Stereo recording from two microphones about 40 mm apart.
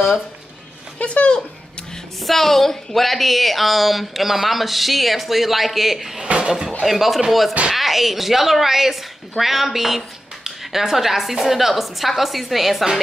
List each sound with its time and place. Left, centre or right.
0.9 s speech: left
2.1 s speech: centre
6.2 s speech: right
6.8 s speech: centre